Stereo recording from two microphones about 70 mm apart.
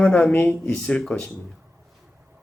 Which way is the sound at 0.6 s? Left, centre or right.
Centre.